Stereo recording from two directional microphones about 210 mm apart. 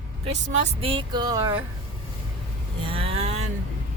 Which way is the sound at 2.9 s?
25° right (ahead or behind).